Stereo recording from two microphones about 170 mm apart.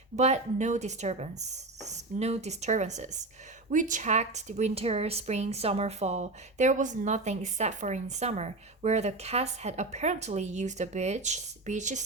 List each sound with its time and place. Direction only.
0.2 s speech: 40° right (ahead or behind)